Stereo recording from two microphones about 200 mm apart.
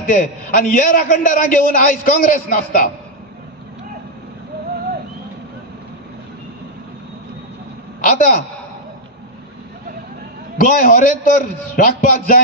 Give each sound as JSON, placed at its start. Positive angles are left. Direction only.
{"t": 0.0, "sound": "a man's voice", "side_deg": 45}
{"t": 8.0, "sound": "a man's voice", "side_deg": 45}
{"t": 10.6, "sound": "a man's voice", "side_deg": 45}